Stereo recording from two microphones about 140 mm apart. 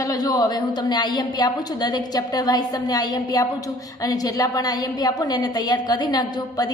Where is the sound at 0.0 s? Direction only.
25° left (ahead or behind).